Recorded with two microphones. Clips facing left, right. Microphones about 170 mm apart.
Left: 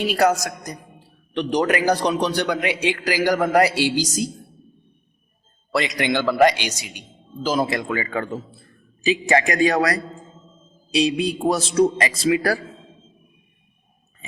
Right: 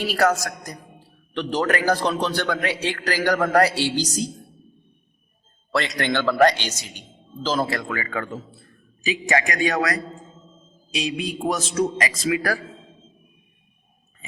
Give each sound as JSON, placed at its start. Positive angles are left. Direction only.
{"t": 0.0, "sound": "a man's voice", "side_deg": 20}
{"t": 5.7, "sound": "a man's voice", "side_deg": 10}